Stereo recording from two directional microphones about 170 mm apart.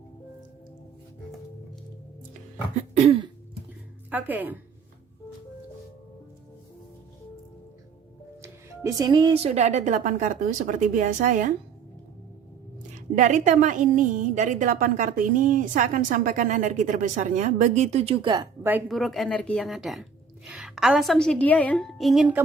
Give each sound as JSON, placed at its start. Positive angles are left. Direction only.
{"t": 2.9, "sound": "cough", "side_deg": -35}
{"t": 4.1, "sound": "speech", "side_deg": -10}
{"t": 8.4, "sound": "a woman's voice", "side_deg": -20}
{"t": 13.1, "sound": "a woman's voice", "side_deg": -45}
{"t": 18.9, "sound": "speech", "side_deg": 0}